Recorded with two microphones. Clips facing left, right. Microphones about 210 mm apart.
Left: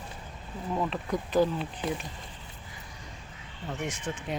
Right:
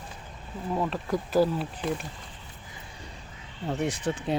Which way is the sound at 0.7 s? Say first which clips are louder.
Right 2 dB; centre (ahead or behind).